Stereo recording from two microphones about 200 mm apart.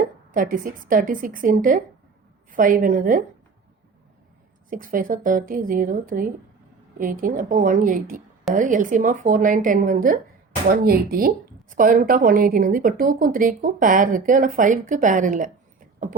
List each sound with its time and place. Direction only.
0.0 s a woman's voice: 40° right (ahead or behind)
4.7 s a woman's voice: 45° right (ahead or behind)